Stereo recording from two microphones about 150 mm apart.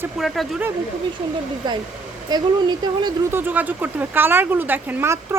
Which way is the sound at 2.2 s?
30° right (ahead or behind).